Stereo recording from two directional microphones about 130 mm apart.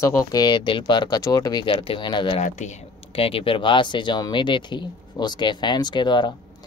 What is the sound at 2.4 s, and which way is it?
Speech, 65° left (ahead or behind).